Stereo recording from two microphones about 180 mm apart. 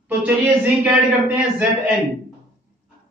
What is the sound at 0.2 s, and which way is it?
A man's voice, 10° right (ahead or behind).